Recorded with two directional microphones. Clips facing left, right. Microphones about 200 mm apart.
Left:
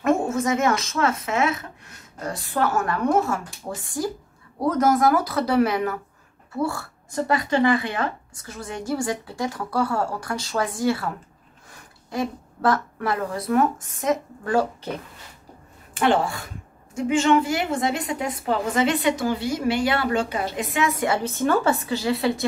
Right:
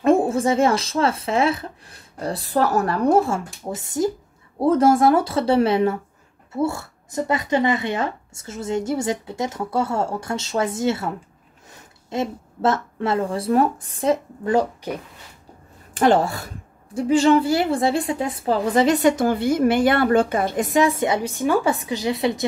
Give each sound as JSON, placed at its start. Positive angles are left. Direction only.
{"t": 0.0, "sound": "speech", "side_deg": -30}
{"t": 3.6, "sound": "a woman's voice", "side_deg": -20}
{"t": 15.9, "sound": "a woman's voice", "side_deg": -40}
{"t": 21.0, "sound": "a woman's voice", "side_deg": -15}